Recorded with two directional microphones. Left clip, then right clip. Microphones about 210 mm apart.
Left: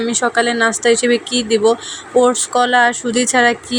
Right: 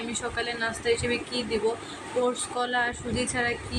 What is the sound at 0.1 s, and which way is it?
Speech, 35° left (ahead or behind).